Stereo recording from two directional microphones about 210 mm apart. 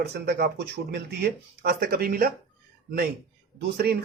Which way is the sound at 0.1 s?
50° right (ahead or behind).